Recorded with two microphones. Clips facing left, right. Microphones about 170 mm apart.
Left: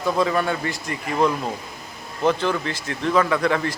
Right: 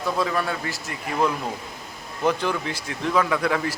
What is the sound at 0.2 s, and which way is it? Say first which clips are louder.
Speech: left 4 dB; centre (ahead or behind).